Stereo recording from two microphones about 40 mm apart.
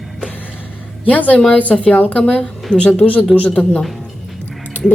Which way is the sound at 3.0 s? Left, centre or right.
Left.